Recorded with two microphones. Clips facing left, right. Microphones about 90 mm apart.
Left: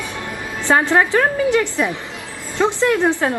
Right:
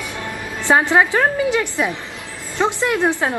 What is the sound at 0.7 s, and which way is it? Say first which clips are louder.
A woman's voice: even; 20° right (ahead or behind).